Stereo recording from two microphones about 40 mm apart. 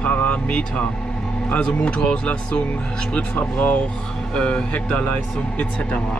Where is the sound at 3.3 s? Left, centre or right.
Left.